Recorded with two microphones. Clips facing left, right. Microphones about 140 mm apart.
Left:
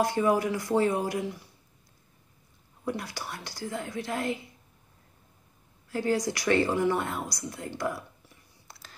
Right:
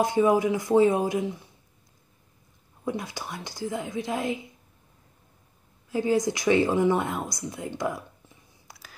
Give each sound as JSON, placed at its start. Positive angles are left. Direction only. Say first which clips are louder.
{"t": 0.0, "sound": "a woman's voice", "louder": "right 3 dB", "side_deg": -15}
{"t": 2.8, "sound": "a woman's voice", "louder": "right 2 dB", "side_deg": -20}
{"t": 5.9, "sound": "speech", "louder": "right 4 dB", "side_deg": -15}